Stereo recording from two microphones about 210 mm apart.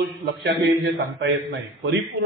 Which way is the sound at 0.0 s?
55° right (ahead or behind).